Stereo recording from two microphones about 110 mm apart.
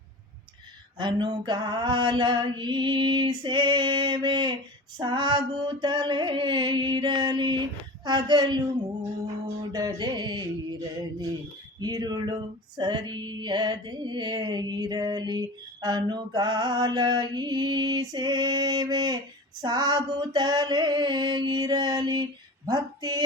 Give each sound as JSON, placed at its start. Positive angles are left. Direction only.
{"t": 0.9, "sound": "a sound", "side_deg": -45}
{"t": 9.7, "sound": "female singing", "side_deg": -35}
{"t": 11.8, "sound": "female singing", "side_deg": -35}